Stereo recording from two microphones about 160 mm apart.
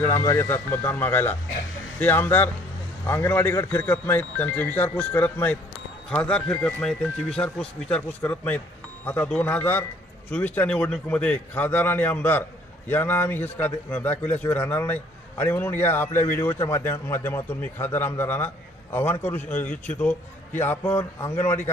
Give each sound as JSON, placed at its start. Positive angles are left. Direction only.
{"t": 0.2, "sound": "a man's voice", "side_deg": 15}